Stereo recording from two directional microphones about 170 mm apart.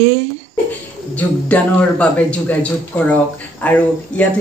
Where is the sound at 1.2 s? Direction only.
10° left (ahead or behind).